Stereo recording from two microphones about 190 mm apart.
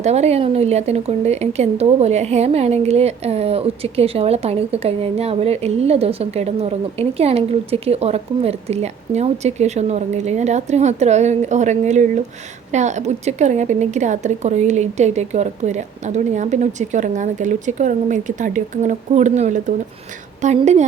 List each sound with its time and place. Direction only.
0.0 s speech: 35° right (ahead or behind)